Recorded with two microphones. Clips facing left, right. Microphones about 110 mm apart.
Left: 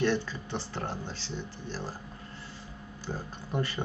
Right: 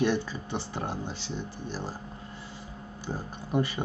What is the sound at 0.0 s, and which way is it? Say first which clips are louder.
Speech: right 1 dB; 15° right (ahead or behind).